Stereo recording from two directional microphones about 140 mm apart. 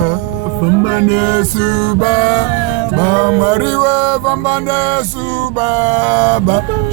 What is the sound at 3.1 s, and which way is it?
Mantra, 30° right (ahead or behind).